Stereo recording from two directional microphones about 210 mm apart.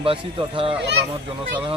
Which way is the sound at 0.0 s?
25° right (ahead or behind).